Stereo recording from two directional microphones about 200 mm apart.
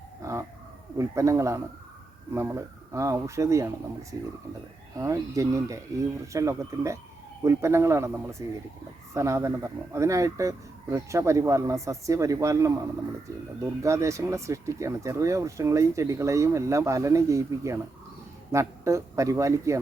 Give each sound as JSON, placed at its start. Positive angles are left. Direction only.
{"t": 0.2, "sound": "dog", "side_deg": -15}
{"t": 0.9, "sound": "speech", "side_deg": -15}
{"t": 4.9, "sound": "speech", "side_deg": -15}
{"t": 13.8, "sound": "speech", "side_deg": -15}